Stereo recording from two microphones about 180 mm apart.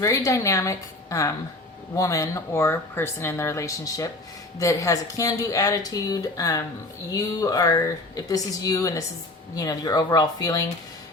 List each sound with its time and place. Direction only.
0.0 s speech: 15° left (ahead or behind)